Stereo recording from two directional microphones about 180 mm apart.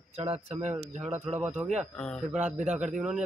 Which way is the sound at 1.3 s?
10° right (ahead or behind).